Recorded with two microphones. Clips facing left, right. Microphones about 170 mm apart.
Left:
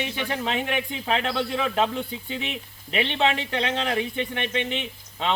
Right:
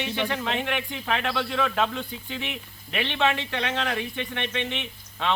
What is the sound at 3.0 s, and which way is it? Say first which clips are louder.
A man's voice: left 2 dB; 30° left (ahead or behind).